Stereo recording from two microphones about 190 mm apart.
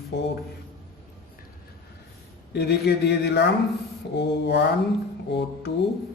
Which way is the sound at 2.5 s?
60° left (ahead or behind).